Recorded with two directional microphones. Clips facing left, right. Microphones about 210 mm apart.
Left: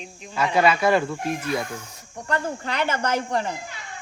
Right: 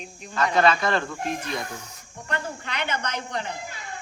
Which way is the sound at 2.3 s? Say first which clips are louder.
Left 5 dB; 35° left (ahead or behind).